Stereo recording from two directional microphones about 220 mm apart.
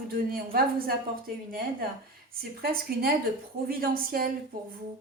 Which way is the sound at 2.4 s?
45° right (ahead or behind).